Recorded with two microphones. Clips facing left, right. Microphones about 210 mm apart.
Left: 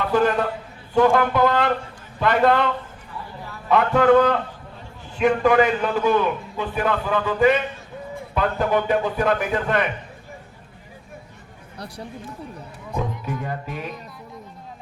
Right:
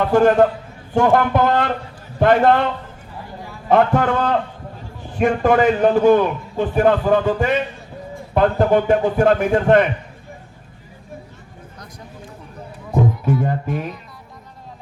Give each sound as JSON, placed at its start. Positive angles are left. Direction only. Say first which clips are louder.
{"t": 0.0, "sound": "a man's voice", "louder": "right 6 dB", "side_deg": -45}
{"t": 3.7, "sound": "a man's voice", "louder": "even", "side_deg": -45}
{"t": 12.9, "sound": "speech", "louder": "right 9 dB", "side_deg": -50}